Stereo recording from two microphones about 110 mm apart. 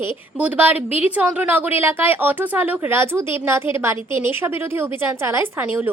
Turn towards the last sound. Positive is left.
turn(degrees=-15)  # may be behind; listen again after turning